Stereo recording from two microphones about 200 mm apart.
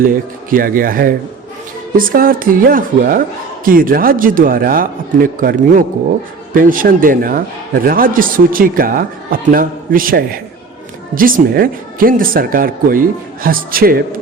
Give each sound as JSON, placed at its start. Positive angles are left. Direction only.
{"t": 0.0, "sound": "a man's voice", "side_deg": -45}